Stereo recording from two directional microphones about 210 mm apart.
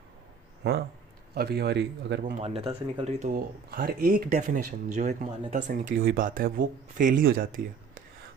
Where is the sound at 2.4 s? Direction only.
30° right (ahead or behind).